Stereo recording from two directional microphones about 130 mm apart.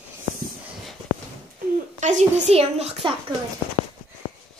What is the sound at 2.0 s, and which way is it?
Speech, 65° right (ahead or behind).